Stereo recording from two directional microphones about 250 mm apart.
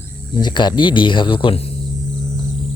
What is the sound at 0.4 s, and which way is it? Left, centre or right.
Speech, centre.